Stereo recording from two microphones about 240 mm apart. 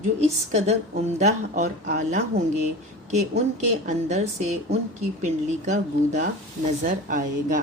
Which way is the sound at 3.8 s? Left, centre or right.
Right.